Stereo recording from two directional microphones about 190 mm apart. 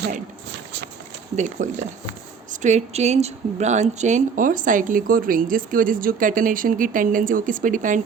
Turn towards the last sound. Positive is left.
turn(degrees=-45)  # may be behind; listen again after turning